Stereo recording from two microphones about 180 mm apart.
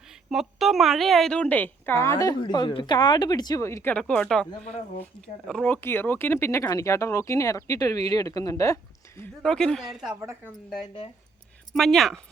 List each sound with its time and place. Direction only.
0.1 s a woman's voice: centre (ahead or behind)
4.6 s speech: 35° left (ahead or behind)
5.2 s a woman's voice: 5° left (ahead or behind); by 8.8 s 20° left (ahead or behind)
9.2 s speech: 5° left (ahead or behind)
11.7 s speech: centre (ahead or behind)